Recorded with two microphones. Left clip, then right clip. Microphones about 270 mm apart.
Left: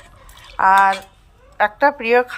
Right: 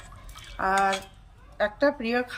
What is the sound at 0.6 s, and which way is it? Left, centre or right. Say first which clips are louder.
Speech: left 11 dB; centre.